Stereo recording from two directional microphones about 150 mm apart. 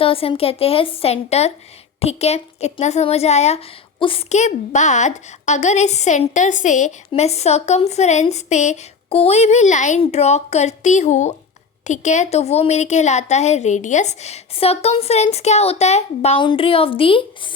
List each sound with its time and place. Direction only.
0.0 s a woman's voice: 40° left (ahead or behind)
16.4 s a woman's voice: 35° left (ahead or behind)